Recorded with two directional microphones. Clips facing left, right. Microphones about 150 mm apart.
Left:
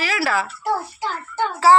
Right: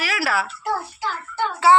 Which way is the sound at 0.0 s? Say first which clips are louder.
Left 2 dB; centre (ahead or behind).